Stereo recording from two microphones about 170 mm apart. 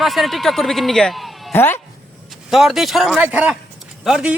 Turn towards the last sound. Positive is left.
turn(degrees=-5)  # may be behind; listen again after turning